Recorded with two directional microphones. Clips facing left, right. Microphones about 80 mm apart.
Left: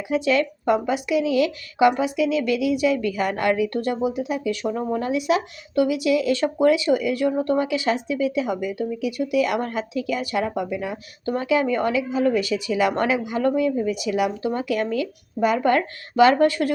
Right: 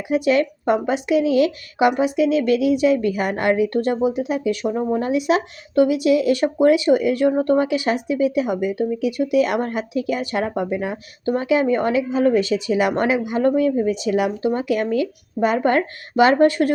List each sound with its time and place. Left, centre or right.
0.1 s a woman's voice: right
8.6 s a woman's voice: right
10.4 s speech: right
11.3 s a woman's voice: right
13.6 s a woman's voice: right